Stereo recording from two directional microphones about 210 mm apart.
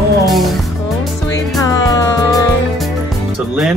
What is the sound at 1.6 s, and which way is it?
Music, 15° left (ahead or behind).